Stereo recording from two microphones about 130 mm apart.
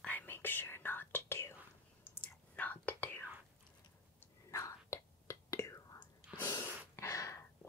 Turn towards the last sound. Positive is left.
turn(degrees=25)  # may be behind; listen again after turning